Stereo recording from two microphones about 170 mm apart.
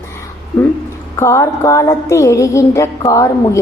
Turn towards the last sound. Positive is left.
turn(degrees=20)  # may be behind; listen again after turning